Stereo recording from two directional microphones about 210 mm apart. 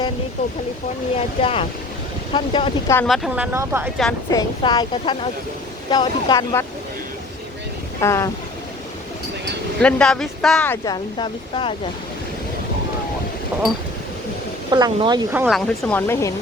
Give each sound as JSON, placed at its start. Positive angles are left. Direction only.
{"t": 1.1, "sound": "speech", "side_deg": 25}
{"t": 2.9, "sound": "speech", "side_deg": 10}
{"t": 3.2, "sound": "speech", "side_deg": -5}
{"t": 4.3, "sound": "speech", "side_deg": 20}
{"t": 8.0, "sound": "speech", "side_deg": 15}
{"t": 9.8, "sound": "speech", "side_deg": 5}
{"t": 10.8, "sound": "speech", "side_deg": 20}
{"t": 13.5, "sound": "speech", "side_deg": -5}
{"t": 14.7, "sound": "speech", "side_deg": -20}
{"t": 15.5, "sound": "speech", "side_deg": 10}